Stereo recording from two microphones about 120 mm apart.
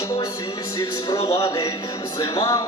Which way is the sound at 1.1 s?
50° left (ahead or behind).